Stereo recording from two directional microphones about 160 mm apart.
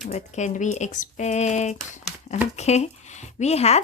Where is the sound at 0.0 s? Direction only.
45° left (ahead or behind).